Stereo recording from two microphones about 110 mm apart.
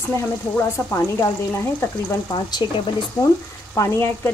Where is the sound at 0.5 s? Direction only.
25° left (ahead or behind).